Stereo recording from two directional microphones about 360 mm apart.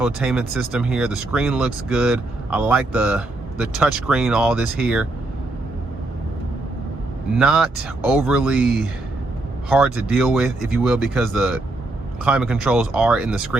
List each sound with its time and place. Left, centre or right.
0.0 s speech: centre
7.3 s speech: centre